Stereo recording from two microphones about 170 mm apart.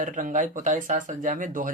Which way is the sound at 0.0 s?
50° right (ahead or behind).